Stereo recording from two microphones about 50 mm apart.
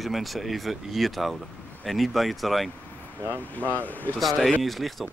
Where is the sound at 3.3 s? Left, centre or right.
Right.